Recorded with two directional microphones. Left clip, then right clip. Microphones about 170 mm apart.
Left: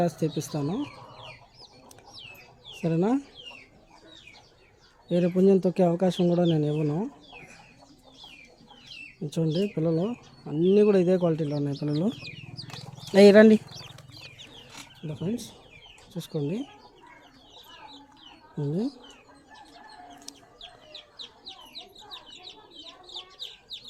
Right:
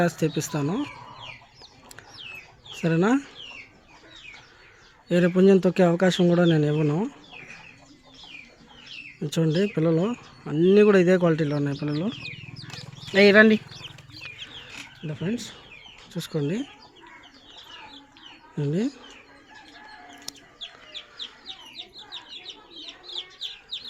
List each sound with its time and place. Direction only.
0.0 s speech: 5° right (ahead or behind)
2.7 s speech: 5° right (ahead or behind)
5.0 s speech: 5° right (ahead or behind)
9.2 s speech: 5° right (ahead or behind)
11.8 s speech: 15° left (ahead or behind)
13.1 s speech: 30° left (ahead or behind)
15.1 s speech: 5° left (ahead or behind)
18.6 s speech: centre (ahead or behind)
20.3 s chicken: centre (ahead or behind)